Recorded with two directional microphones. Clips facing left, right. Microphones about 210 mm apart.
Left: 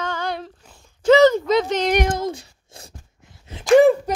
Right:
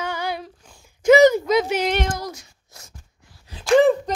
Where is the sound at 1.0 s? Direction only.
10° right (ahead or behind).